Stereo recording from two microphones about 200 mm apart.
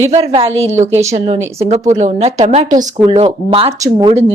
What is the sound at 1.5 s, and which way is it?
Speech, 35° right (ahead or behind).